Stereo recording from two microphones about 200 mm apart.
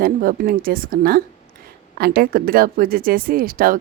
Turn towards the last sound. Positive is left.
turn(degrees=-45)  # may be behind; listen again after turning